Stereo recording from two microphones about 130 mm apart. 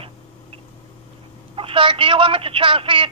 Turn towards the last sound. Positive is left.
turn(degrees=-40)  # may be behind; listen again after turning